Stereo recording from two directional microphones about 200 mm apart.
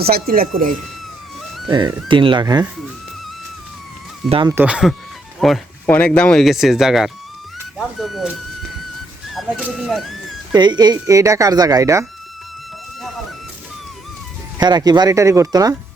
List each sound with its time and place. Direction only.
0.0 s speech: 50° right (ahead or behind)
2.0 s speech: 25° right (ahead or behind)
4.3 s speech: 25° right (ahead or behind)
4.5 s speech: 5° right (ahead or behind)
9.3 s speech: 5° right (ahead or behind)
10.5 s speech: 20° right (ahead or behind)
13.0 s a sound: centre (ahead or behind)
14.6 s speech: 20° right (ahead or behind)